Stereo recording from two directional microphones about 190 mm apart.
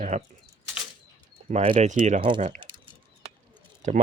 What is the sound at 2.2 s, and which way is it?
Speech, 25° right (ahead or behind).